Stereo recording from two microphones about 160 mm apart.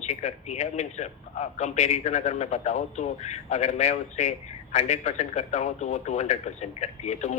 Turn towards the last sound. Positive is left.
turn(degrees=45)  # may be behind; listen again after turning